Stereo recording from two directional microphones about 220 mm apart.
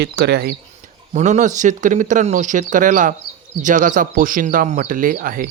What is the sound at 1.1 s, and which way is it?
Speech, 30° right (ahead or behind).